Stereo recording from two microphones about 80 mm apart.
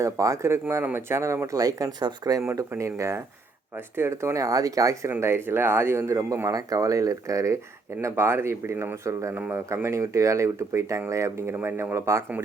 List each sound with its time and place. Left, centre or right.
0.0 s speech: right
2.6 s speech: right
5.2 s speech: right
6.5 s speech: right